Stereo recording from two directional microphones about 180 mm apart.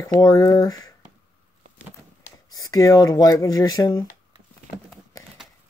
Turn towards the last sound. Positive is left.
turn(degrees=20)  # may be behind; listen again after turning